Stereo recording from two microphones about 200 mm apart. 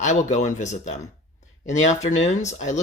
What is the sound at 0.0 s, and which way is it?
Speech, 35° left (ahead or behind).